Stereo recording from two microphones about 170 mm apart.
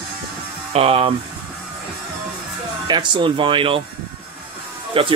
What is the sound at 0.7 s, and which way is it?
Speech, 35° right (ahead or behind).